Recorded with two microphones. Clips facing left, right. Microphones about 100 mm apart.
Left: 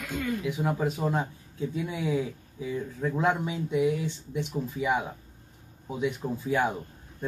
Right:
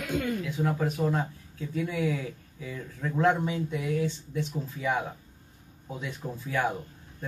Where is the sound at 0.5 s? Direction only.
20° left (ahead or behind).